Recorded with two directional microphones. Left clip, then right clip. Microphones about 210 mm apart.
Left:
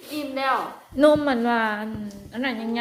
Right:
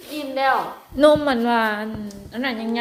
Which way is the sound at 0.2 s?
5° right (ahead or behind).